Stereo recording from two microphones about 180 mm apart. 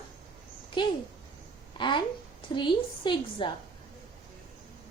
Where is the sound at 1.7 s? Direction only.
25° left (ahead or behind).